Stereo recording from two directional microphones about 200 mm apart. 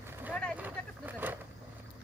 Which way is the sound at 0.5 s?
10° right (ahead or behind).